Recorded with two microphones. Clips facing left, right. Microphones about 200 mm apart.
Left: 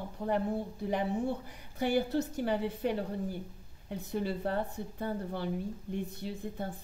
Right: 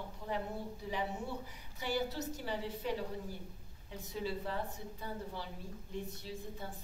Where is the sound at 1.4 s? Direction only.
55° left (ahead or behind).